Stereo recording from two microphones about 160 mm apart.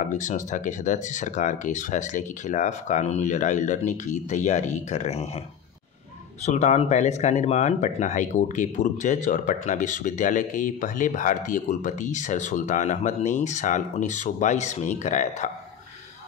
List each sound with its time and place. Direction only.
0.1 s speech: 50° left (ahead or behind)
6.4 s speech: 45° left (ahead or behind)